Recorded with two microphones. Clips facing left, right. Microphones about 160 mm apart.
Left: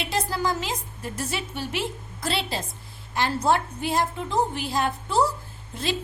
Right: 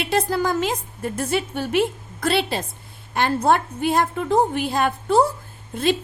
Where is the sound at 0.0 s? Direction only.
60° right (ahead or behind).